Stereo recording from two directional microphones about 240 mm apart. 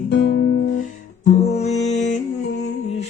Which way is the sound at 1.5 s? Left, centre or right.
Left.